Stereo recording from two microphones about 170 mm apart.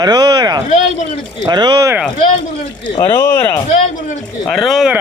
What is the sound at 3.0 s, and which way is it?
Speech, 15° left (ahead or behind).